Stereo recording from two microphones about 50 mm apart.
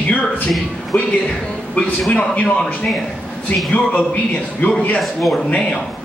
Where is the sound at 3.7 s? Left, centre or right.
Left.